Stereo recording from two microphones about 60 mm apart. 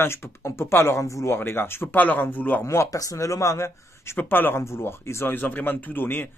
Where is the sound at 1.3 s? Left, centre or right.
Left.